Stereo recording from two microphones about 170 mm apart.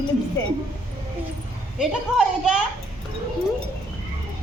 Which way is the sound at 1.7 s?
5° right (ahead or behind).